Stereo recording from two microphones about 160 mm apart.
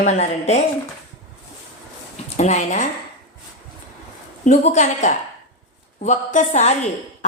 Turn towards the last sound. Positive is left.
turn(degrees=45)  # may be behind; listen again after turning